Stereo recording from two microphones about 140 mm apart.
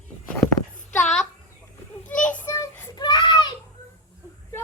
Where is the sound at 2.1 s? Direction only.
65° left (ahead or behind).